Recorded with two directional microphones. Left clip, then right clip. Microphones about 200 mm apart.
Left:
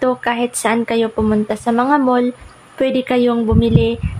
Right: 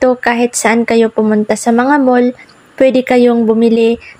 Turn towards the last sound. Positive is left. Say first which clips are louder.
# right 6 dB
turn(degrees=-25)  # may be behind; listen again after turning